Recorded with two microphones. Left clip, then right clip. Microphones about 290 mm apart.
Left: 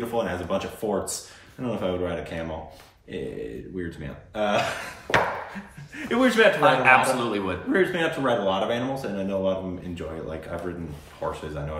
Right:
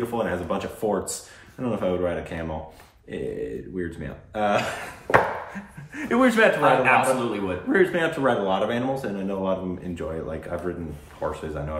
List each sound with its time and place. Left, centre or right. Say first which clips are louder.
0.0 s speech: right 1 dB; centre